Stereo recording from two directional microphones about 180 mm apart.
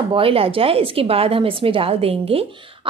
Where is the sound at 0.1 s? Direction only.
30° right (ahead or behind).